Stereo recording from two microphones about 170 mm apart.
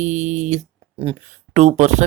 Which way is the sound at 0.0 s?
45° right (ahead or behind).